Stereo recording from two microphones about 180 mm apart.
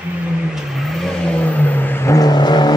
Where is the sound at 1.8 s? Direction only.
10° left (ahead or behind).